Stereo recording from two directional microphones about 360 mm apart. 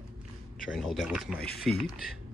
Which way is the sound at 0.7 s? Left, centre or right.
Centre.